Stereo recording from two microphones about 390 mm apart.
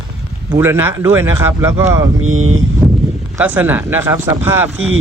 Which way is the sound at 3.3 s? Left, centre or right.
Centre.